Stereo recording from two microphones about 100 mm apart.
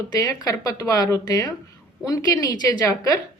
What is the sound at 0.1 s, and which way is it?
Speech, 40° left (ahead or behind).